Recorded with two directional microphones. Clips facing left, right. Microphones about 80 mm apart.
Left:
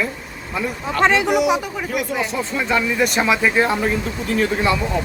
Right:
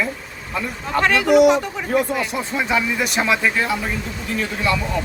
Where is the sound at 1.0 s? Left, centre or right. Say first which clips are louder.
Left 4 dB; left.